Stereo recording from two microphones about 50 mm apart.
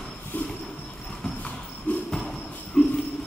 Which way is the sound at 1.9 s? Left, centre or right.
Left.